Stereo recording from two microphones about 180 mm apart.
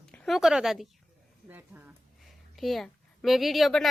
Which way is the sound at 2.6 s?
Centre (ahead or behind).